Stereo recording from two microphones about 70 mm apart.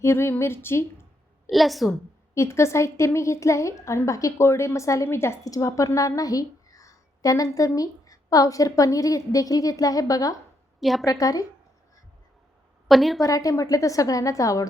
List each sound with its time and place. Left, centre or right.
0.0 s a woman's voice: left
1.5 s a woman's voice: centre
2.3 s a woman's voice: left
5.0 s a woman's voice: left
5.5 s a woman's voice: left
10.8 s a woman's voice: centre
11.0 s a woman's voice: left
12.9 s a woman's voice: centre
13.2 s a woman's voice: left